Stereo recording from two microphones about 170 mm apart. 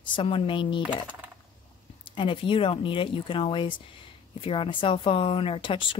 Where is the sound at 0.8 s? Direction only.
10° right (ahead or behind).